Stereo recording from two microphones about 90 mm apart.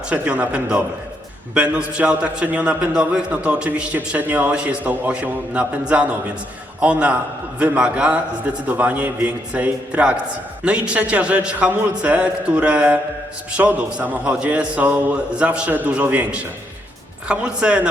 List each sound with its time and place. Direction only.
0.1 s a man's voice: 15° right (ahead or behind)